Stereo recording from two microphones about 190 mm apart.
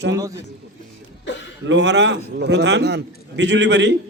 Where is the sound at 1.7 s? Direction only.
65° right (ahead or behind).